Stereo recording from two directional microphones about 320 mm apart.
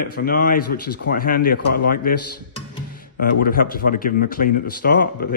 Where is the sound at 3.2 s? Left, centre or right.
Left.